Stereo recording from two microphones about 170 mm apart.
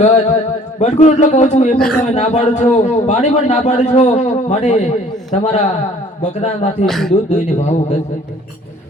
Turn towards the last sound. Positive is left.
turn(degrees=45)  # may be behind; listen again after turning